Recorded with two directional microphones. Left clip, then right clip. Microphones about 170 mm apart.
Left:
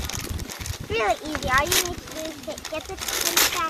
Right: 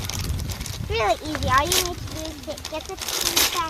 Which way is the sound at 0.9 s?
75° right (ahead or behind).